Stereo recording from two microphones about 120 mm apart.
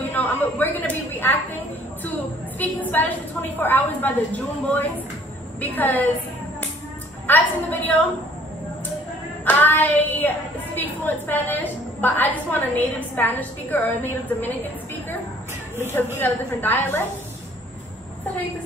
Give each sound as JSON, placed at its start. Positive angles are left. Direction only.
{"t": 0.1, "sound": "a sound", "side_deg": 15}
{"t": 2.6, "sound": "a woman's voice", "side_deg": 15}
{"t": 7.2, "sound": "a woman's voice", "side_deg": 15}
{"t": 9.4, "sound": "a woman's voice", "side_deg": 15}
{"t": 16.2, "sound": "a woman's voice", "side_deg": 15}